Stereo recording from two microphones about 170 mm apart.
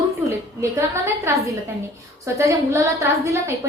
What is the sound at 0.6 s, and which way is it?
A woman's voice, 15° right (ahead or behind).